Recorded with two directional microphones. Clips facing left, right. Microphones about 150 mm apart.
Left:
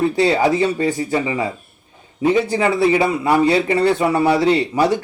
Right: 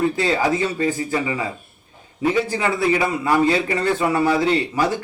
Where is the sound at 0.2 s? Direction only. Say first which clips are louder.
Left 4 dB; 20° left (ahead or behind).